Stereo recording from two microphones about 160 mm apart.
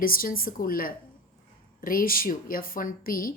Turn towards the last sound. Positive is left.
turn(degrees=60)  # may be behind; listen again after turning